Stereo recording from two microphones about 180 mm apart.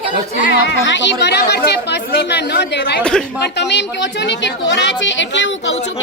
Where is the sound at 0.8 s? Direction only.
85° left; by 3.0 s 70° left (ahead or behind).